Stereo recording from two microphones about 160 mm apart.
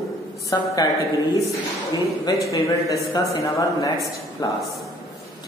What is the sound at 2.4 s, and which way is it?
Mantra, 20° left (ahead or behind).